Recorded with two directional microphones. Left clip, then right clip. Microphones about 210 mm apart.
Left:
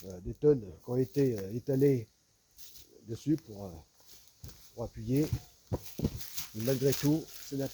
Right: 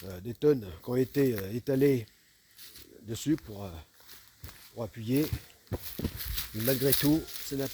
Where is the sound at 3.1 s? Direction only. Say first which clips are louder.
Right 2 dB; 60° right (ahead or behind).